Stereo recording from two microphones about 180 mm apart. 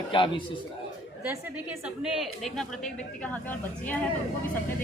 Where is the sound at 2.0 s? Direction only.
Centre (ahead or behind).